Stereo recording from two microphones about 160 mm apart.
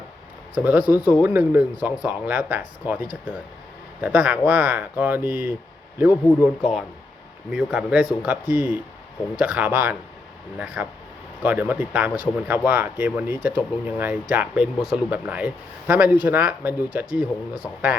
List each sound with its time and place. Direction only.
0.5 s speech: 10° right (ahead or behind)
6.1 s speech: 20° left (ahead or behind)
7.5 s speech: 5° right (ahead or behind)